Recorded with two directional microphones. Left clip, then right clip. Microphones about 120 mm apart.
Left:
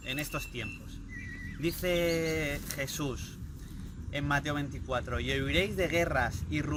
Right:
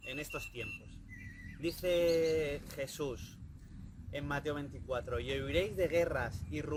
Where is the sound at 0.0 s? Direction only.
30° right (ahead or behind).